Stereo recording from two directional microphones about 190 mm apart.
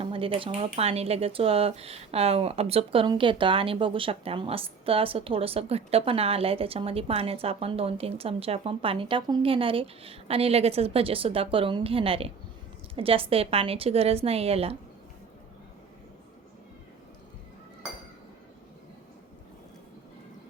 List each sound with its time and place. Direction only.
0.0 s speech: 30° right (ahead or behind)